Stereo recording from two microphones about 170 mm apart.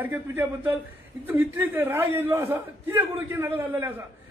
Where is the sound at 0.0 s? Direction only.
15° right (ahead or behind).